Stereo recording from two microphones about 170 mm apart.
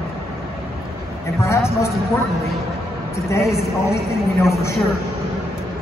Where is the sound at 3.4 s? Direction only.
Centre (ahead or behind).